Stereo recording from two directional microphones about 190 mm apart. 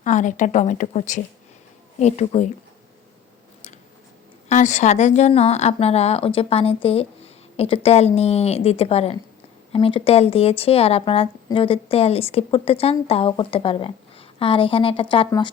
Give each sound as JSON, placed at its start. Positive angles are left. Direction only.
{"t": 0.0, "sound": "a woman's voice", "side_deg": 40}
{"t": 4.4, "sound": "a woman's voice", "side_deg": 40}